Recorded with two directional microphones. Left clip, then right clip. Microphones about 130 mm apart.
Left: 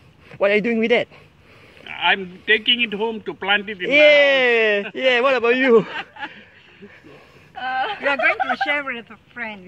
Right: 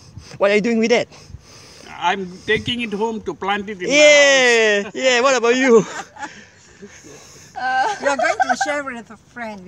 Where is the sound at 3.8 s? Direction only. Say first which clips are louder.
Right 2 dB; 35° right (ahead or behind).